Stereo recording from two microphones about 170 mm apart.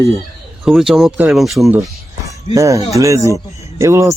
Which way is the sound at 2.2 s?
20° right (ahead or behind).